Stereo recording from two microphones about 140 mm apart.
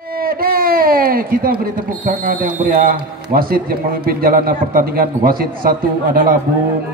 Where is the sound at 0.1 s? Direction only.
90° right.